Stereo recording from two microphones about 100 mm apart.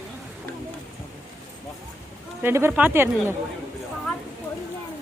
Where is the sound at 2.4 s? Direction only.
25° right (ahead or behind).